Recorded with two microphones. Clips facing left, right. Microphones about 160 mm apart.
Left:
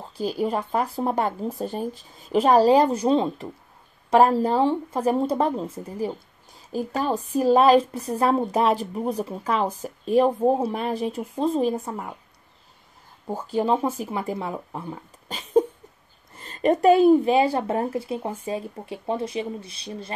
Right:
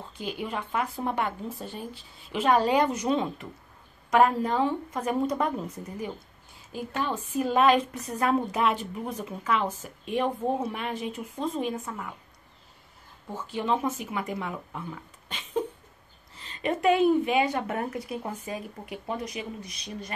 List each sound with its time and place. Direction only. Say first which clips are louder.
0.2 s a woman's voice: left 8 dB; 35° left (ahead or behind)
13.3 s a woman's voice: left 6 dB; 40° left (ahead or behind)